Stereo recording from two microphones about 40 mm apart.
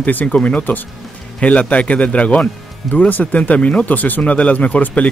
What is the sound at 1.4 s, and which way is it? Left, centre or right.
A man's voice, left.